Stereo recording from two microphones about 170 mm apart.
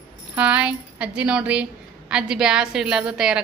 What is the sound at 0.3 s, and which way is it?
A woman's voice, 5° right (ahead or behind).